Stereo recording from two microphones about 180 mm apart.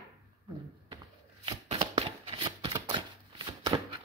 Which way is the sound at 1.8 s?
25° right (ahead or behind).